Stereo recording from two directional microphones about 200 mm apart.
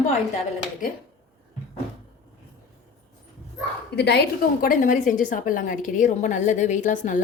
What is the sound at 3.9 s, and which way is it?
Speech, 55° left (ahead or behind).